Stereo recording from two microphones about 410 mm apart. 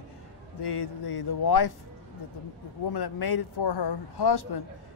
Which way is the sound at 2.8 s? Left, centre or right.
Left.